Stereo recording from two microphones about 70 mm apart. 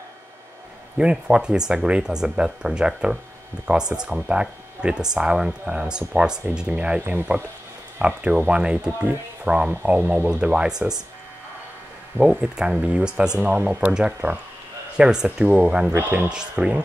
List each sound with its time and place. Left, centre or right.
0.9 s speech: centre
6.7 s speech: right
10.4 s speech: centre
12.3 s speech: centre
16.0 s speech: right
16.3 s speech: centre